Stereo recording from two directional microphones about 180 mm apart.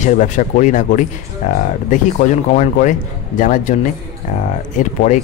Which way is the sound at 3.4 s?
45° left (ahead or behind).